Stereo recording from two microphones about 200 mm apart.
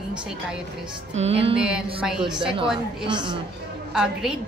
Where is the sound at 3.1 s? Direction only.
25° right (ahead or behind).